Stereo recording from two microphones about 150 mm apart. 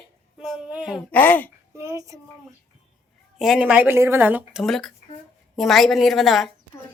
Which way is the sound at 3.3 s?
5° right (ahead or behind).